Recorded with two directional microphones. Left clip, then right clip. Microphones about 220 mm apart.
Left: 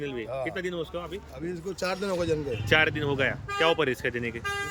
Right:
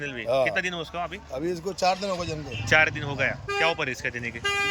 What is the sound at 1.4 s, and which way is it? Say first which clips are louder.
Speech: right 5 dB; 25° right (ahead or behind).